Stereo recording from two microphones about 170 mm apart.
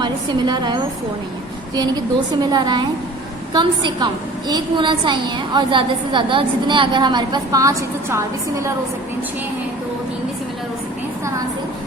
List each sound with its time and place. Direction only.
0.0 s a woman's voice: 25° right (ahead or behind)
2.4 s a woman's voice: 25° right (ahead or behind)